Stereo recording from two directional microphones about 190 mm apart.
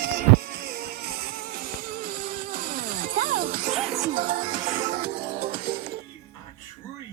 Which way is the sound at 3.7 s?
Centre (ahead or behind).